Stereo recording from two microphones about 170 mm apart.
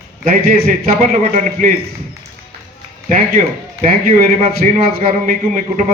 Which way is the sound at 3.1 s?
50° right (ahead or behind).